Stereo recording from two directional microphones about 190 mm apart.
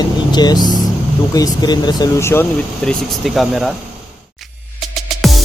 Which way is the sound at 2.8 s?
Centre (ahead or behind).